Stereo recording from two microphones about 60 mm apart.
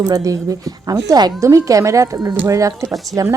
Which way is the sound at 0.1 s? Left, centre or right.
Right.